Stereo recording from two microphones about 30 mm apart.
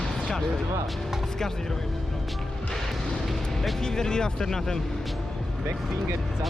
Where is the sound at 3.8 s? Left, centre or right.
Centre.